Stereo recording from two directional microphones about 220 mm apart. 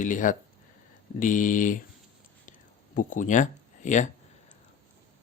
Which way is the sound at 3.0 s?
35° left (ahead or behind).